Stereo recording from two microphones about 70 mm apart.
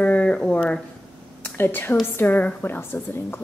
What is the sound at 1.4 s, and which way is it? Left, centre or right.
A woman's voice, left.